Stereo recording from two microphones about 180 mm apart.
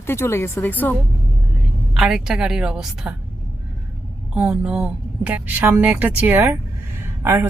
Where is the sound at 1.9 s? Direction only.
5° right (ahead or behind).